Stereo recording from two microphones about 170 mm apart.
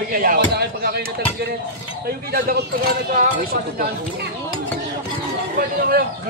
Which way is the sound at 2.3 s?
65° right (ahead or behind).